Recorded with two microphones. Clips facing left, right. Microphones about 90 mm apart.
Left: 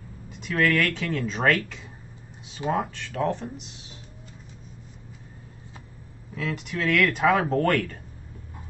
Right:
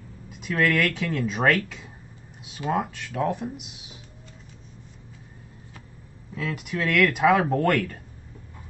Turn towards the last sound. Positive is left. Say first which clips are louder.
# even
turn(degrees=0)  # may be behind; listen again after turning